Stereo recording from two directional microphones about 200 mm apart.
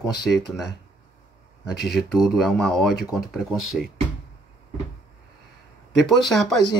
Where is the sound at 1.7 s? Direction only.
50° left (ahead or behind).